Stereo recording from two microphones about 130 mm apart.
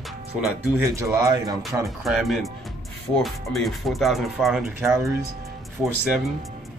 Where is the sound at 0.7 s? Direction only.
25° right (ahead or behind).